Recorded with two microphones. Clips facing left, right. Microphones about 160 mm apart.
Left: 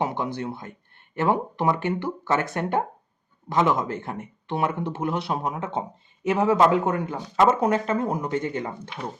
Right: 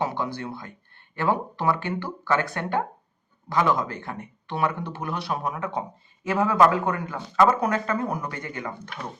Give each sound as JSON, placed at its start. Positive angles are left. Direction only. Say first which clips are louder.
{"t": 0.0, "sound": "speech", "louder": "left 1 dB", "side_deg": 20}